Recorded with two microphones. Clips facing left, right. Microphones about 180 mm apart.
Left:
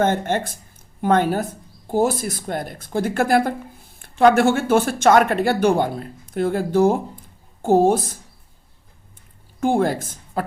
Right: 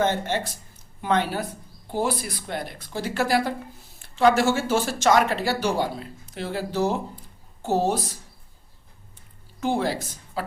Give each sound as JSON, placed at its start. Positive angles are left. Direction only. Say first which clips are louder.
{"t": 0.0, "sound": "speech", "louder": "left 4 dB", "side_deg": 50}
{"t": 9.6, "sound": "speech", "louder": "left 5 dB", "side_deg": 50}